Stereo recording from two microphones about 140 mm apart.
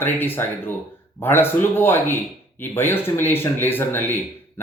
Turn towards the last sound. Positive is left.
turn(degrees=15)  # may be behind; listen again after turning